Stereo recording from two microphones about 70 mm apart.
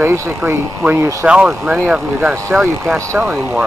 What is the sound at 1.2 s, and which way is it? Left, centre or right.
Speech, centre.